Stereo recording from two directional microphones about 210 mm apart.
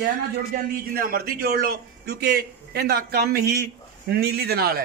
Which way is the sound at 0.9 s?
45° right (ahead or behind).